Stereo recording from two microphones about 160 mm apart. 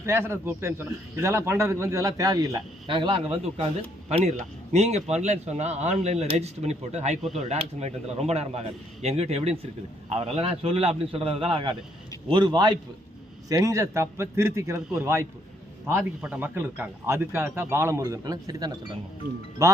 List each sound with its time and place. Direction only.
0.0 s a man's voice: 15° right (ahead or behind)
19.2 s speech: 60° right (ahead or behind)
19.6 s a man's voice: 20° right (ahead or behind)